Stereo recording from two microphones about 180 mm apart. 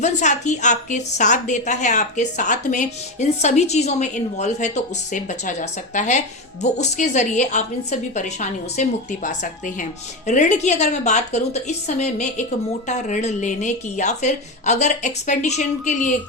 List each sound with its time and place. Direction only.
0.0 s a woman's voice: 40° left (ahead or behind)